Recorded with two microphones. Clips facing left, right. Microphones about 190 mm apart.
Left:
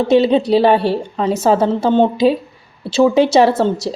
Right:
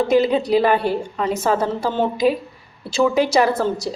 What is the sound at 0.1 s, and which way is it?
A woman's voice, 30° left (ahead or behind).